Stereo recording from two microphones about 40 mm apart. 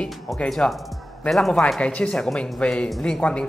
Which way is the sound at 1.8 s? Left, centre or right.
Left.